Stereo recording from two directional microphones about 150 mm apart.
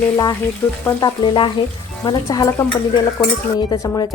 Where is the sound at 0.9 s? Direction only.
25° left (ahead or behind).